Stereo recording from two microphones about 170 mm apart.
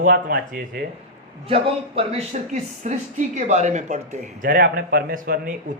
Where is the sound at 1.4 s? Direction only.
35° right (ahead or behind).